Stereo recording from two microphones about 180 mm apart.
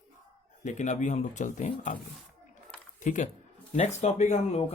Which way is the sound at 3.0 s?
45° left (ahead or behind).